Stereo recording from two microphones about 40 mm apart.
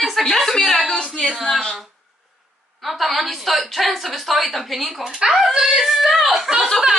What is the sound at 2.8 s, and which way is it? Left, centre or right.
A woman's voice, centre.